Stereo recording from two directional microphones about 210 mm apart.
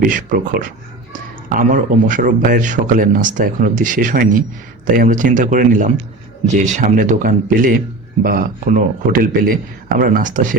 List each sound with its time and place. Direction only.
0.0 s speech: 40° right (ahead or behind)